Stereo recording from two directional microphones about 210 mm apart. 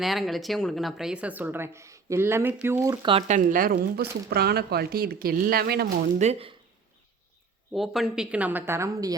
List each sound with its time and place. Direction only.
0.0 s a woman's voice: centre (ahead or behind); by 5.9 s 50° right (ahead or behind)
6.1 s speech: 30° right (ahead or behind)
7.7 s a woman's voice: centre (ahead or behind)